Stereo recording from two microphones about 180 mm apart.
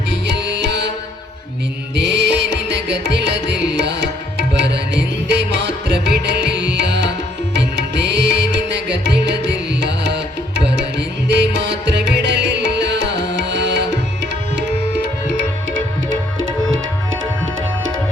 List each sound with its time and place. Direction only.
0.1 s music: 75° right (ahead or behind)
2.0 s music: 75° right (ahead or behind)
4.4 s tabla: 70° right (ahead or behind)
5.3 s music: 75° right (ahead or behind)
16.4 s music: 90° right